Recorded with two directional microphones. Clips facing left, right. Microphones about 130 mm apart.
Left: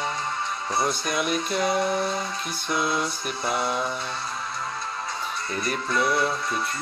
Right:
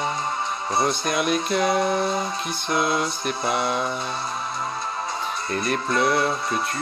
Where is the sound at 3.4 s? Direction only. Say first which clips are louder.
Right 2 dB; 5° right (ahead or behind).